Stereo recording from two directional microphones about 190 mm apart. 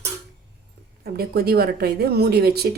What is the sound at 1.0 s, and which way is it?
A woman's voice, 55° right (ahead or behind).